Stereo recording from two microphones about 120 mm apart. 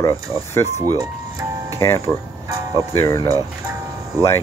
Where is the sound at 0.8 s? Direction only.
30° right (ahead or behind).